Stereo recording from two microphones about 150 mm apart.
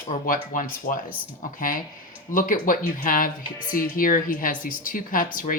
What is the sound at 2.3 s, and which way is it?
Speech, 65° left (ahead or behind).